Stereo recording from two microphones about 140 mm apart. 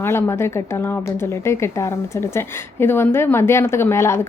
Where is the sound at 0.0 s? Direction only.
15° left (ahead or behind).